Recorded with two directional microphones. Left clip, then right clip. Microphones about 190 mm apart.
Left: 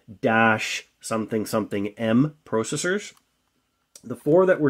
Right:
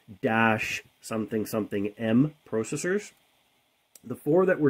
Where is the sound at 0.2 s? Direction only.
20° right (ahead or behind).